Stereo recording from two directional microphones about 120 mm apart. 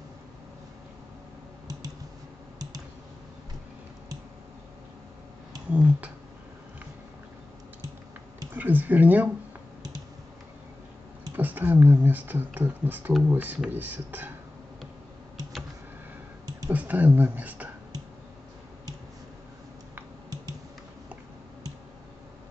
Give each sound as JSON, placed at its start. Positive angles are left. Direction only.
{"t": 5.7, "sound": "a sound", "side_deg": -10}
{"t": 8.5, "sound": "speech", "side_deg": -15}
{"t": 11.3, "sound": "speech", "side_deg": -15}
{"t": 16.7, "sound": "speech", "side_deg": -15}